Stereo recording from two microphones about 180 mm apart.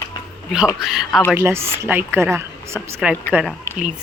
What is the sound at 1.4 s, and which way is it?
A woman's voice, 15° right (ahead or behind).